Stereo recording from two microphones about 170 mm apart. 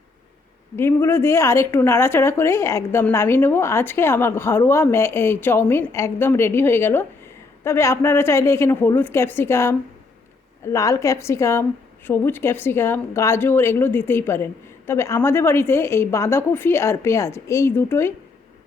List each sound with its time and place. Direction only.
0.8 s a woman's voice: 15° left (ahead or behind)